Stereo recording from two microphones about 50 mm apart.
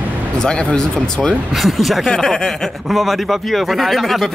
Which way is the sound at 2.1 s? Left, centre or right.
Centre.